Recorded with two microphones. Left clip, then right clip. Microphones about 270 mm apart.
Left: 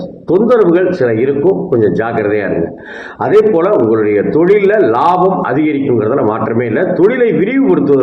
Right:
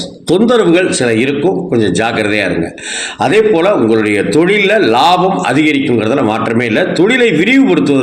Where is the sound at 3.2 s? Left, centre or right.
Right.